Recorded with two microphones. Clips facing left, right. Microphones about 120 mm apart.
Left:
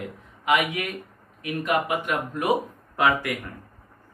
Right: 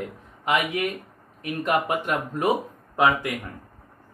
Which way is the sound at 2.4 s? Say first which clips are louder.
Even; 25° right (ahead or behind).